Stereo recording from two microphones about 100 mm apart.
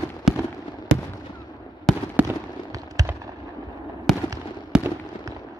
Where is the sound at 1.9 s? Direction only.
5° left (ahead or behind).